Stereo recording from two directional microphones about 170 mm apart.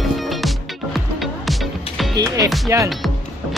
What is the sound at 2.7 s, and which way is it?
Speech, 15° right (ahead or behind).